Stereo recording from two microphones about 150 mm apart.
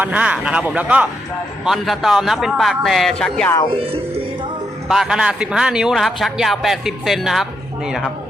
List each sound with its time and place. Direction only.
0.0 s a man's voice: 10° right (ahead or behind)
3.7 s speech: 40° right (ahead or behind)
4.9 s a man's voice: 5° right (ahead or behind)